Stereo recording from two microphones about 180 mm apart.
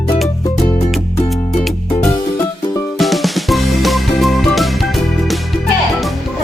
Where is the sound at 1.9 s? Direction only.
25° left (ahead or behind).